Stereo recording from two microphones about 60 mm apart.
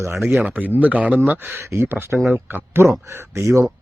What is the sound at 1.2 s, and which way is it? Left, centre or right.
Speech, right.